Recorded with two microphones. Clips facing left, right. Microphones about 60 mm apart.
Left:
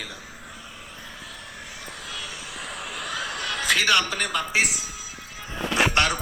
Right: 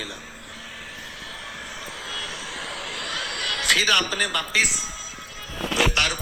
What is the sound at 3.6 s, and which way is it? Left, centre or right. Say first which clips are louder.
Speech: even; centre.